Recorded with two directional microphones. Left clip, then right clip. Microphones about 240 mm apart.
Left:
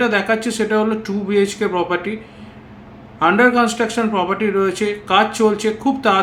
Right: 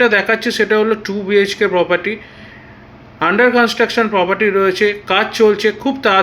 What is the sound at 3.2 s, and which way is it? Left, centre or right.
A man's voice, centre.